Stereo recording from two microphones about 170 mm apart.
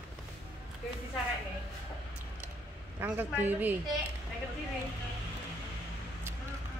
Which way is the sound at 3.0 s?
10° right (ahead or behind).